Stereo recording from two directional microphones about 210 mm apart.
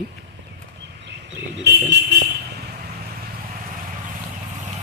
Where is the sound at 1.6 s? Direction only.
55° right (ahead or behind).